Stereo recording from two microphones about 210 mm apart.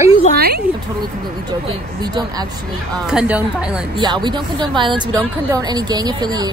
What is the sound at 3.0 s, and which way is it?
Speech, 5° right (ahead or behind).